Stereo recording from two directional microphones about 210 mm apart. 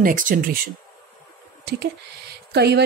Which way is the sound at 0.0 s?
40° right (ahead or behind).